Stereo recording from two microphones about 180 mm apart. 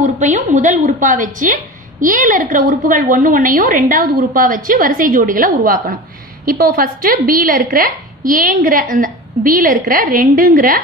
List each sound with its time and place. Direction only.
0.0 s a woman's voice: 45° right (ahead or behind)